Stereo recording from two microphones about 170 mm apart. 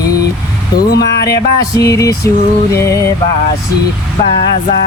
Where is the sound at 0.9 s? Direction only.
70° left (ahead or behind).